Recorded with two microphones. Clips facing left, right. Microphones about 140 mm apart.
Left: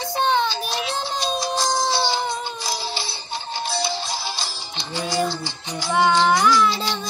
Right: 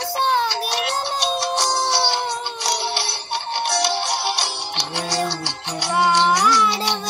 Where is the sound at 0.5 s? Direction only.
70° right (ahead or behind).